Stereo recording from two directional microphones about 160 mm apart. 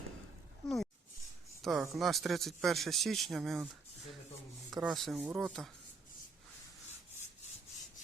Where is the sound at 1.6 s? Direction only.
Centre (ahead or behind).